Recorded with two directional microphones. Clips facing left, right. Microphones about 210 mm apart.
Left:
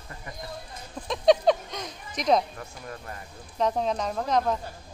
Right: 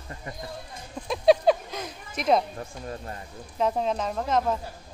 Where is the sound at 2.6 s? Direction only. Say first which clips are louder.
Right 4 dB; 25° right (ahead or behind).